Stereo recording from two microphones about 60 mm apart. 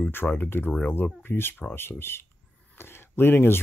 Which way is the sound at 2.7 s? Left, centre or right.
Left.